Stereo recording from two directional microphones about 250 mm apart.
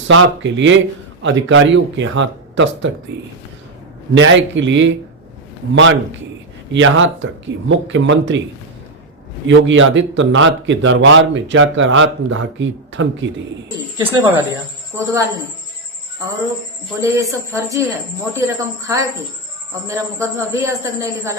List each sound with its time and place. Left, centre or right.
0.1 s speech: right
6.7 s speech: right
9.5 s speech: right
13.7 s a man's voice: centre
17.0 s a man's voice: centre